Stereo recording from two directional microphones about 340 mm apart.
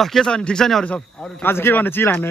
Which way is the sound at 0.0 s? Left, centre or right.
Centre.